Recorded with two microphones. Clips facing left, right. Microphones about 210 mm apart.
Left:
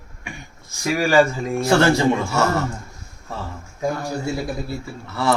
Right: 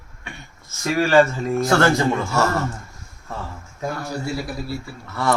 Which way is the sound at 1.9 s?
Centre (ahead or behind).